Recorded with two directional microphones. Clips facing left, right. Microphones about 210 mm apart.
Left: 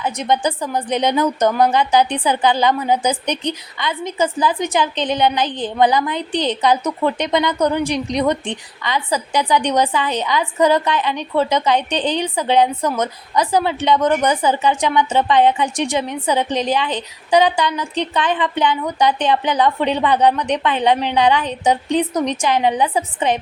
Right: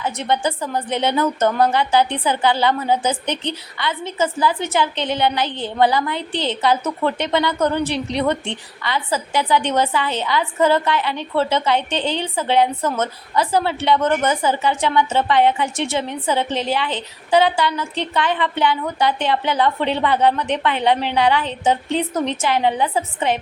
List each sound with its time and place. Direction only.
0.0 s a woman's voice: 15° left (ahead or behind)